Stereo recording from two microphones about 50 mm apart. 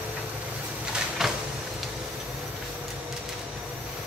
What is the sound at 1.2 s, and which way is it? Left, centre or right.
Vehicle, centre.